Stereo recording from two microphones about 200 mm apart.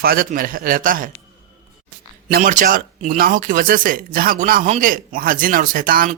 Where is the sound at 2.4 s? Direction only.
40° right (ahead or behind).